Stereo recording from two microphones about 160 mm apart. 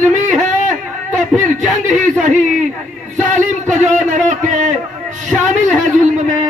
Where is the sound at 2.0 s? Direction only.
50° right (ahead or behind).